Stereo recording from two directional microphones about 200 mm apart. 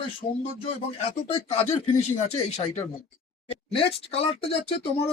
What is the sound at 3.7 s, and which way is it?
Speech, 30° left (ahead or behind).